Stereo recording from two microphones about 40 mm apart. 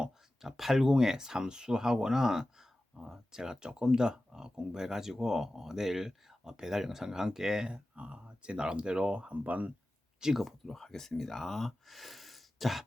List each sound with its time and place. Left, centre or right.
0.4 s speech: centre
7.7 s speech: right
10.2 s speech: centre
10.4 s speech: centre